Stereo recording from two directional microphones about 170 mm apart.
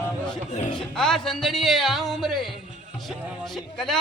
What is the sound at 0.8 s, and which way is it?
A man's voice, 5° left (ahead or behind).